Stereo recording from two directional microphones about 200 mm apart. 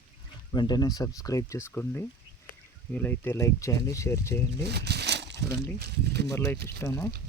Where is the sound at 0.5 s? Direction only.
20° left (ahead or behind).